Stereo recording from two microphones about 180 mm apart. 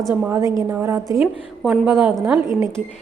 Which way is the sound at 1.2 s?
5° right (ahead or behind).